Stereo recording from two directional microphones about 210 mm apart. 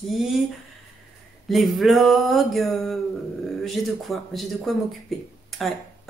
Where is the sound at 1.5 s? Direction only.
Centre (ahead or behind).